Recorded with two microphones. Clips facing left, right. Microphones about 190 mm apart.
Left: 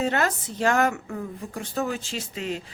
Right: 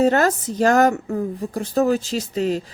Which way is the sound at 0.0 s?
40° right (ahead or behind).